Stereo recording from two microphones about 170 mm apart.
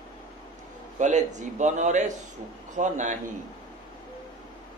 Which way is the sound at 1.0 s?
45° right (ahead or behind).